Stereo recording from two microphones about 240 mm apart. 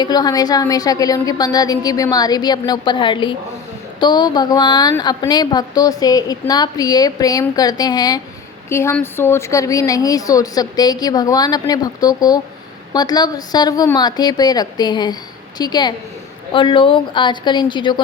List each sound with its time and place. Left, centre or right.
0.0 s a woman's voice: centre